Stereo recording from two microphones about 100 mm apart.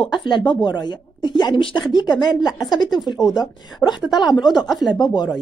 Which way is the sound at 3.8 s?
15° left (ahead or behind).